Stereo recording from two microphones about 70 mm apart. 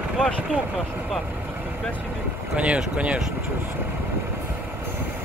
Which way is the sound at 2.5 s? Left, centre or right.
Centre.